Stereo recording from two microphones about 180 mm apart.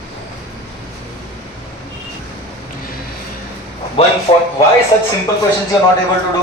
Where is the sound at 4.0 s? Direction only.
30° left (ahead or behind).